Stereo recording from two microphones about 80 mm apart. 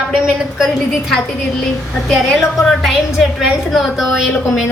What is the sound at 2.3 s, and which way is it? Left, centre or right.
A woman's voice, centre.